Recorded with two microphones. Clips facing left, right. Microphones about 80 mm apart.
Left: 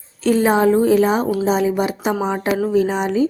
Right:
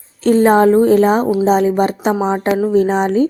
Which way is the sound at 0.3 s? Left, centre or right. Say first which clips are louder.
Right 4 dB; right.